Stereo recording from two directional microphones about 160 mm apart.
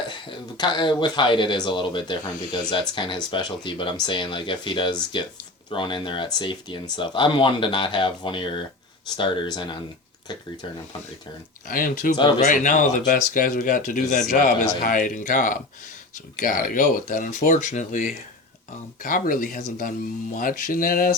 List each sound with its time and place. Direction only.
0.1 s speech: 30° left (ahead or behind)
11.7 s speech: 60° left (ahead or behind)